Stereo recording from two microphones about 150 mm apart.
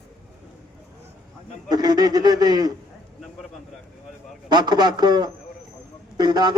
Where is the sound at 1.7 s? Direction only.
25° right (ahead or behind).